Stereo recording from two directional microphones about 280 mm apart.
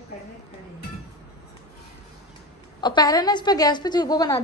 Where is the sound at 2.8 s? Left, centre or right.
Centre.